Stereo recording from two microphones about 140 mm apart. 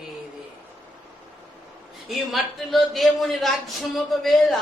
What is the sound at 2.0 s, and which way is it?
A man's voice, centre (ahead or behind).